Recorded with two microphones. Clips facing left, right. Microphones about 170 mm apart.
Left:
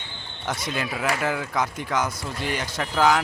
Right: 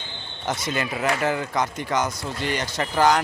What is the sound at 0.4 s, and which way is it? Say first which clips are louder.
Speech: right 2 dB; centre (ahead or behind).